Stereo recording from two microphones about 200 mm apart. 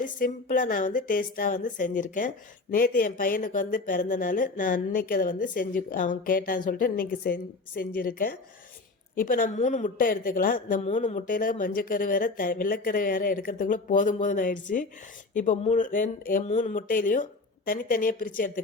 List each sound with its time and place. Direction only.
0.0 s a woman's voice: 40° left (ahead or behind)